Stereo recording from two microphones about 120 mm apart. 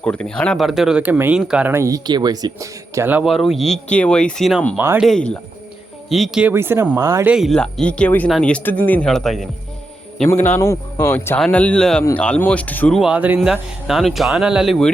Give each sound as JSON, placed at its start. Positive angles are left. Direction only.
{"t": 0.0, "sound": "speech", "side_deg": 10}
{"t": 1.7, "sound": "speech", "side_deg": -25}
{"t": 2.0, "sound": "speech", "side_deg": -35}
{"t": 3.2, "sound": "speech", "side_deg": 0}
{"t": 6.5, "sound": "speech", "side_deg": -20}
{"t": 7.3, "sound": "speech", "side_deg": -5}
{"t": 7.5, "sound": "speech", "side_deg": 5}
{"t": 10.2, "sound": "speech", "side_deg": 15}
{"t": 11.3, "sound": "speech", "side_deg": 5}
{"t": 13.0, "sound": "speech", "side_deg": -10}